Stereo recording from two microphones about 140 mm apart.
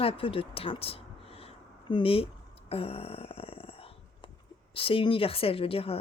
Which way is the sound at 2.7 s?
45° left (ahead or behind).